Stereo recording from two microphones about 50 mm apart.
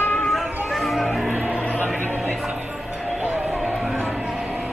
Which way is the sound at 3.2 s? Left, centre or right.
Right.